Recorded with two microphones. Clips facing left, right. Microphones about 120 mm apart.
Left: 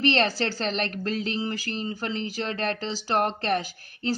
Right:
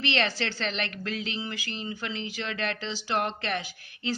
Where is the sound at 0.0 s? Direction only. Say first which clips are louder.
Left 5 dB; 40° left (ahead or behind).